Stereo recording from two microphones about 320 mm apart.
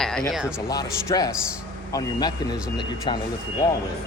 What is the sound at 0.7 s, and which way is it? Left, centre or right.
Speech, centre.